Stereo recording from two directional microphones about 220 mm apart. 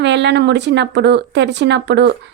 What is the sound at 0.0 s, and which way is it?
Speech, 50° right (ahead or behind).